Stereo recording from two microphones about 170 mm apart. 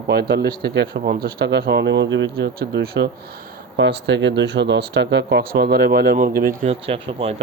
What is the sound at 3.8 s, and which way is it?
Speech, 90° right.